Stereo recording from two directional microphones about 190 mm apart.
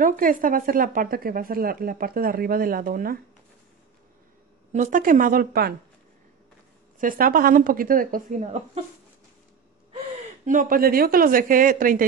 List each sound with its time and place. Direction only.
0.0 s speech: 45° right (ahead or behind)
4.7 s speech: 45° right (ahead or behind)
7.0 s speech: 50° right (ahead or behind)
10.4 s speech: 45° right (ahead or behind)